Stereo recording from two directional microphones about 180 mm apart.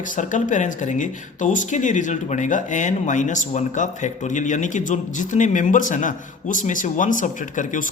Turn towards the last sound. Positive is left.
turn(degrees=45)  # may be behind; listen again after turning